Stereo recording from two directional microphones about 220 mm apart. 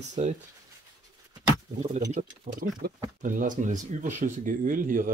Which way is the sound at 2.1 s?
40° right (ahead or behind).